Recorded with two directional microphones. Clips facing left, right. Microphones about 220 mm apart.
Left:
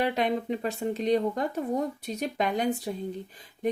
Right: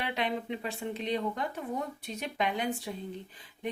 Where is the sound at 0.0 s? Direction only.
45° left (ahead or behind).